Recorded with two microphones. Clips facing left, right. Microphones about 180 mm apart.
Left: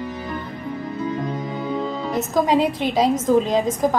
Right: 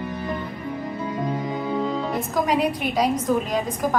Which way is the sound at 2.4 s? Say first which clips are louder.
Left 3 dB; 25° left (ahead or behind).